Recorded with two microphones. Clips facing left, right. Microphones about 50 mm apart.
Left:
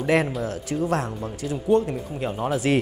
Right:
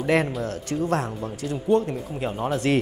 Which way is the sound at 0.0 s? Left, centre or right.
Centre.